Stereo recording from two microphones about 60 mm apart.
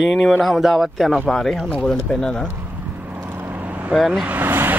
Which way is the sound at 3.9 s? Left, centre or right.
Centre.